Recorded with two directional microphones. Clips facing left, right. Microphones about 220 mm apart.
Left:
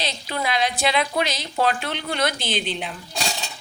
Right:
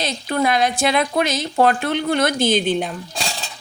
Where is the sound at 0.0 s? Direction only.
50° right (ahead or behind).